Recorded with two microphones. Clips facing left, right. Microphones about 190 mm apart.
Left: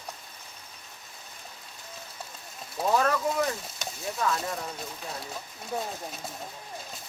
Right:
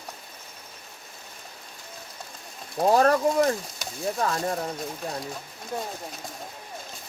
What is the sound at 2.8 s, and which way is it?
Speech, 40° right (ahead or behind).